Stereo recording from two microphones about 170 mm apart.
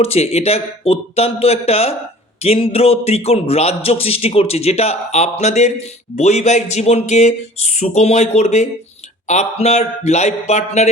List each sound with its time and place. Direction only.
0.0 s speech: 35° left (ahead or behind)